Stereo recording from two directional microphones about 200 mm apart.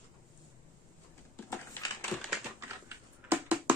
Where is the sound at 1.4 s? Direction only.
15° left (ahead or behind).